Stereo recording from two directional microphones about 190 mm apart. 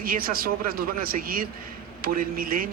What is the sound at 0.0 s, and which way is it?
Speech, 50° right (ahead or behind).